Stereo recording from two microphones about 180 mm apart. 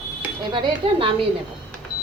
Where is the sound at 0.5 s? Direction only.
30° right (ahead or behind).